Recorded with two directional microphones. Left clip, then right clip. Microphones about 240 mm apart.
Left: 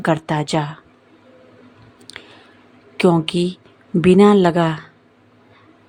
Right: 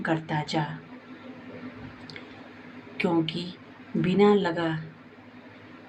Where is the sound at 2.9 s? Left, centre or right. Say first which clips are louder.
Left 10 dB; left.